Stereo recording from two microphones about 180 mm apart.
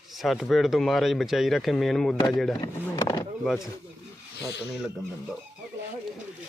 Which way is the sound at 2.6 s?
25° left (ahead or behind).